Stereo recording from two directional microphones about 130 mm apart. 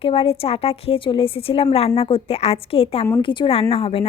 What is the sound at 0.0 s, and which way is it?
A woman's voice, 45° left (ahead or behind).